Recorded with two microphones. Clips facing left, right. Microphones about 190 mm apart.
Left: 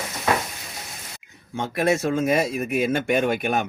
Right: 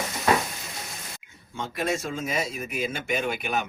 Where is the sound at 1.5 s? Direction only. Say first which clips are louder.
Left 6 dB; 65° left (ahead or behind); by 3.7 s 50° left (ahead or behind).